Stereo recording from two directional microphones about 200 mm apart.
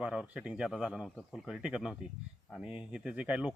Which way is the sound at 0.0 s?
5° right (ahead or behind).